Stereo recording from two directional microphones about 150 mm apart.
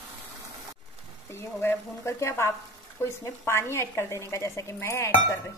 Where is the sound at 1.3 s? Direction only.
15° left (ahead or behind).